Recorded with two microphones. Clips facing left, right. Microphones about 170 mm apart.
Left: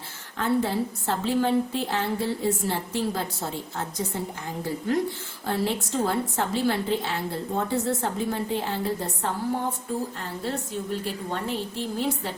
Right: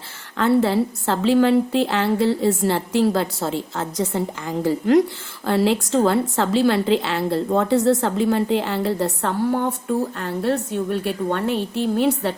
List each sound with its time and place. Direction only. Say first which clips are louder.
0.3 s a woman's voice: right 7 dB; 80° right